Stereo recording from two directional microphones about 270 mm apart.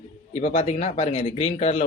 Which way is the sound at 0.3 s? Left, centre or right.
Left.